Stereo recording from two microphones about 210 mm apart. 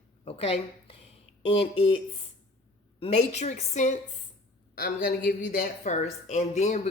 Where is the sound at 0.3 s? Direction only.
30° left (ahead or behind).